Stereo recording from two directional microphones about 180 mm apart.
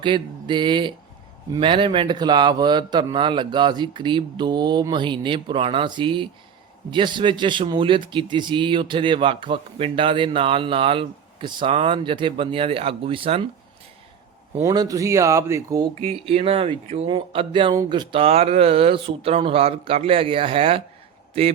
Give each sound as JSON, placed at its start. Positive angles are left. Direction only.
{"t": 0.0, "sound": "speech", "side_deg": -25}
{"t": 14.6, "sound": "speech", "side_deg": -20}
{"t": 16.0, "sound": "speech", "side_deg": -35}